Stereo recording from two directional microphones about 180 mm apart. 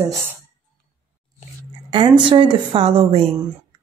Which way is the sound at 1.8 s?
25° right (ahead or behind).